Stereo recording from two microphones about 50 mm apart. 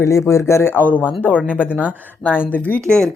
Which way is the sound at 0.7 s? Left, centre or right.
Left.